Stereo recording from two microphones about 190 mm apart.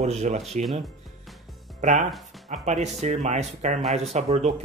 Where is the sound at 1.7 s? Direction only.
40° right (ahead or behind).